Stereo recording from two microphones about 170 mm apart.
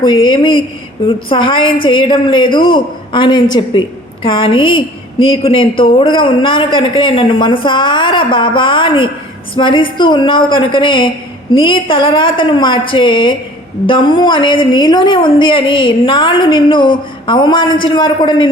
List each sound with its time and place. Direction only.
0.0 s a woman's voice: 30° left (ahead or behind)